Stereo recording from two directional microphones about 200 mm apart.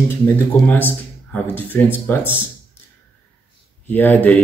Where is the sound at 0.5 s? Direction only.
10° left (ahead or behind).